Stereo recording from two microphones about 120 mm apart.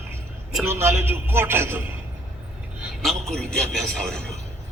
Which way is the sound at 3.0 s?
5° left (ahead or behind).